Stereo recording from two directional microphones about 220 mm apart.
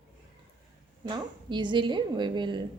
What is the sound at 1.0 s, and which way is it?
A woman's voice, 20° right (ahead or behind).